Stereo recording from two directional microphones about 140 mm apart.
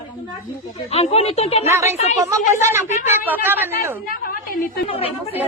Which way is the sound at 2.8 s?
55° left (ahead or behind).